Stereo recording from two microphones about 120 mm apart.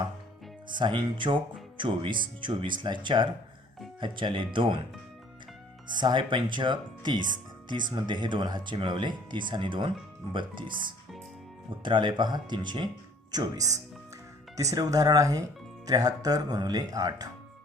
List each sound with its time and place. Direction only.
0.7 s speech: 40° right (ahead or behind)
5.9 s speech: 40° right (ahead or behind)